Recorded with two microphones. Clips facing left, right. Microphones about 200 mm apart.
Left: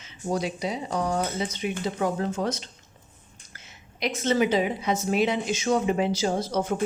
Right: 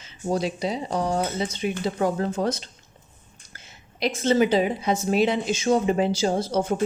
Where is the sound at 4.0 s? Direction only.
30° right (ahead or behind).